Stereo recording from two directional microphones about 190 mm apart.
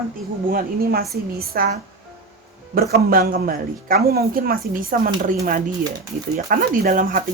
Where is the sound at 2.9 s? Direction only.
50° right (ahead or behind).